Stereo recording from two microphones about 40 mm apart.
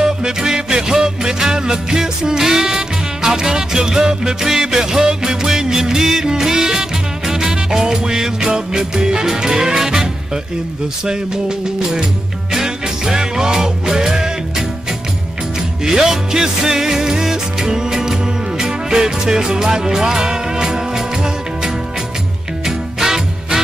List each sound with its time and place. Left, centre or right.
0.0 s music: centre
15.8 s music: centre